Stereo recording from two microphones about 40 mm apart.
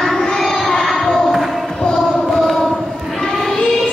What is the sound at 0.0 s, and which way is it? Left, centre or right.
Child singing, centre.